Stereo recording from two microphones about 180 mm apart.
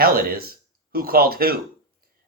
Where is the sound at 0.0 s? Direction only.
55° right (ahead or behind).